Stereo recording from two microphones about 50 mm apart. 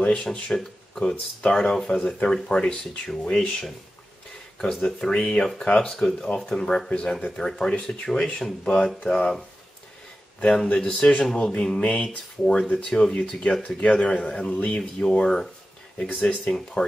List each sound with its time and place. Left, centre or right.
0.0 s speech: left
0.5 s speech: centre
4.6 s speech: centre
10.4 s speech: centre
10.9 s speech: left
14.5 s a sound: left
14.8 s speech: centre
16.0 s speech: left